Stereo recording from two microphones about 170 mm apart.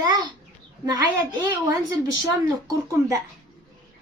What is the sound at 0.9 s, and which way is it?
Speech, 20° right (ahead or behind).